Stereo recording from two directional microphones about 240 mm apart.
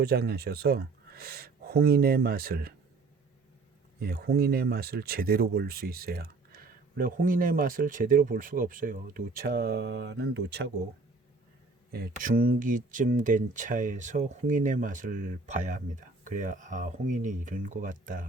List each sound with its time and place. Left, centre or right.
0.0 s speech: right
4.0 s speech: right
11.9 s speech: right